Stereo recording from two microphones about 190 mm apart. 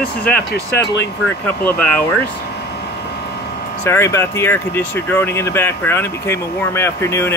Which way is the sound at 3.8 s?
15° left (ahead or behind).